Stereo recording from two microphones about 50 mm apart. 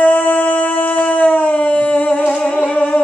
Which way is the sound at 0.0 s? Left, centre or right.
Left.